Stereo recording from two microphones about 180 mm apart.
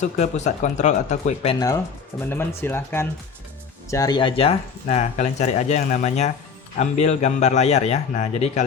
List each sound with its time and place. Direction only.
0.0 s speech: 40° left (ahead or behind)
1.5 s speech: 20° left (ahead or behind); by 8.6 s 40° left (ahead or behind)